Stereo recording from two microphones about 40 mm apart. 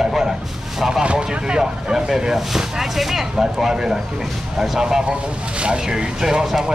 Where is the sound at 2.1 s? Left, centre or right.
Centre.